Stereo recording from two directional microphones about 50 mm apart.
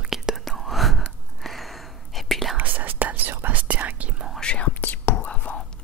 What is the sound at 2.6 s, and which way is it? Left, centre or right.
Whispering, right.